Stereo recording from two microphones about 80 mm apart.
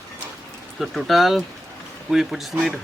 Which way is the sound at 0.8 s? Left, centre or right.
Centre.